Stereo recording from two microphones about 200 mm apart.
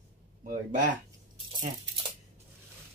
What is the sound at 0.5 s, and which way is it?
Speech, 40° right (ahead or behind).